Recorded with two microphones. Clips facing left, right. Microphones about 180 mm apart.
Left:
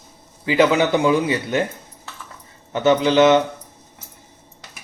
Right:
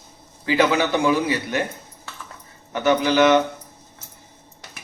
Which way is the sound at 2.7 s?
25° left (ahead or behind).